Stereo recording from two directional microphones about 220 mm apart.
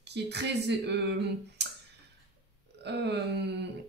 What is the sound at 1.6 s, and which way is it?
Clicking, 50° right (ahead or behind).